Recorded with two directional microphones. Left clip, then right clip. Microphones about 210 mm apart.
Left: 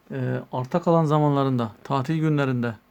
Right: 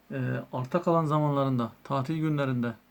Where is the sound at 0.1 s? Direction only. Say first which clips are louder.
Left 5 dB; 40° left (ahead or behind).